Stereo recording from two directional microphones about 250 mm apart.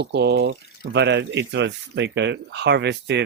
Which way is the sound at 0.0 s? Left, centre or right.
Right.